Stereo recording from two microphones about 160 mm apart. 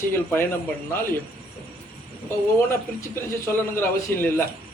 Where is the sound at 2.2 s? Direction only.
15° left (ahead or behind).